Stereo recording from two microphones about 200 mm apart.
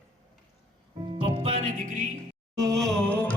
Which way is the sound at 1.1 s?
30° right (ahead or behind).